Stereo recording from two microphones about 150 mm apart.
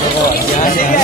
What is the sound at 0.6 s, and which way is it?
Speech, 75° left (ahead or behind).